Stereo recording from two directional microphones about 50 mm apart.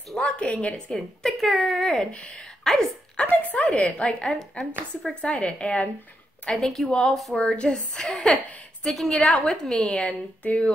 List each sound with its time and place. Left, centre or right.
0.1 s a sound: centre
0.5 s a woman's voice: left
0.9 s a woman's voice: centre
3.3 s a woman's voice: left
6.5 s a woman's voice: centre
7.3 s a woman's voice: centre
9.8 s a woman's voice: left